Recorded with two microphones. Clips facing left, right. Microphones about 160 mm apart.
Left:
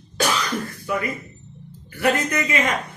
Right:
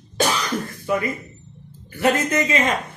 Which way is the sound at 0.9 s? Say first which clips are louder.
Right 3 dB; 25° right (ahead or behind).